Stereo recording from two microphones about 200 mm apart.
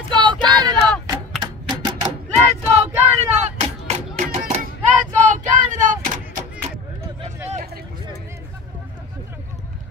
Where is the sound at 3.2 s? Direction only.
35° right (ahead or behind).